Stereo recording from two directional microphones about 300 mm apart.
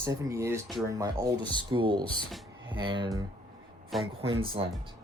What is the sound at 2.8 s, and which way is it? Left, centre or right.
Speech, centre.